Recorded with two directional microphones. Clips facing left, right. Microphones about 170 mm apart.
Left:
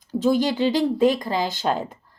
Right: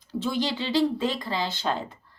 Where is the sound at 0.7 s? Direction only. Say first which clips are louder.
Left 3 dB; 15° left (ahead or behind).